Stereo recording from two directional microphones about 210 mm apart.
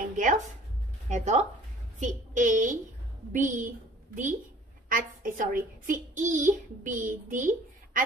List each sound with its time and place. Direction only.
1.0 s a woman's voice: 35° right (ahead or behind)